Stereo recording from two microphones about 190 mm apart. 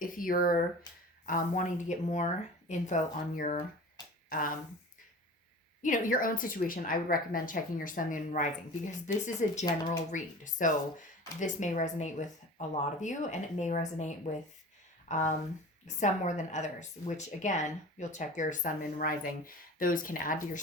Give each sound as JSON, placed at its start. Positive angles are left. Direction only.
{"t": 0.0, "sound": "a sound", "side_deg": 45}
{"t": 1.2, "sound": "a woman's voice", "side_deg": 45}
{"t": 5.8, "sound": "a woman's voice", "side_deg": 45}
{"t": 15.1, "sound": "a woman's voice", "side_deg": 40}